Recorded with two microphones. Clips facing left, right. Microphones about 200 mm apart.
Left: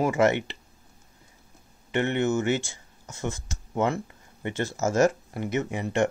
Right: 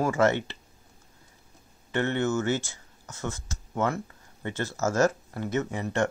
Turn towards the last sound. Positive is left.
turn(degrees=20)  # may be behind; listen again after turning